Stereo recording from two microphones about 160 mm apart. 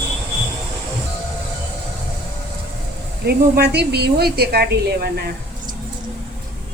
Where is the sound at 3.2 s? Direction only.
75° right (ahead or behind).